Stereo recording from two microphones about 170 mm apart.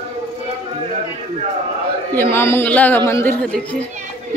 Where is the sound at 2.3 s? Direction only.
15° left (ahead or behind).